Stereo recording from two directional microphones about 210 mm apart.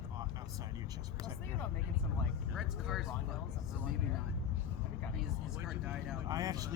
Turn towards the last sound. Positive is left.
turn(degrees=-15)  # may be behind; listen again after turning